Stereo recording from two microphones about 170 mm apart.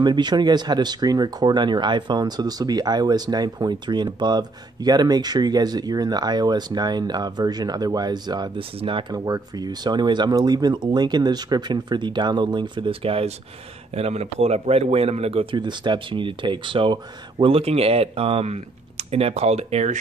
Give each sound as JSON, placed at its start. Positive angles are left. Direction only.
{"t": 0.0, "sound": "speech", "side_deg": -25}